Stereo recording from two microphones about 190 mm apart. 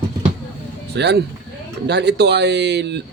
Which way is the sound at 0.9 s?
60° right (ahead or behind).